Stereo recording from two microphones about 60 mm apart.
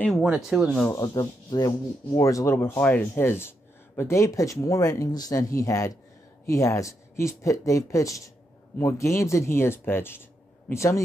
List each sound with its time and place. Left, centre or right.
0.5 s speech: centre
0.9 s speech: left
2.2 s speech: left
2.8 s speech: left
4.2 s speech: left
10.7 s speech: left